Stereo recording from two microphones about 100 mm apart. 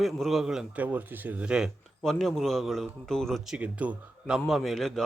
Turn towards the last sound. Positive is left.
turn(degrees=5)  # may be behind; listen again after turning